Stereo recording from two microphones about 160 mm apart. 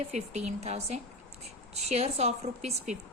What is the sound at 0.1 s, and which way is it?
A woman's voice, 45° right (ahead or behind).